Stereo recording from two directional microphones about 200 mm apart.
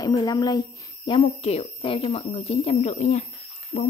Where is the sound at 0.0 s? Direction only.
20° left (ahead or behind).